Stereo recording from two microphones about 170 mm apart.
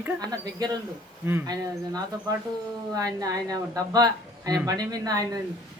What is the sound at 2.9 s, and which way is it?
A woman's voice, 20° right (ahead or behind).